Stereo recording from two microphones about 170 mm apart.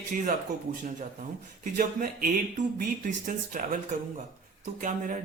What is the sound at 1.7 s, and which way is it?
A man's voice, 55° right (ahead or behind).